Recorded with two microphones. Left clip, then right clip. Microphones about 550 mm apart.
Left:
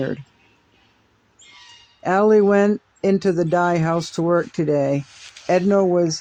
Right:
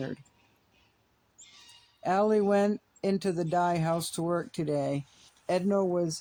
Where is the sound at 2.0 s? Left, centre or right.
Right.